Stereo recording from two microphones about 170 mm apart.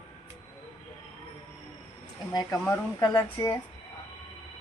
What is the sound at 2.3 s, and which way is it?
Speech, 25° left (ahead or behind).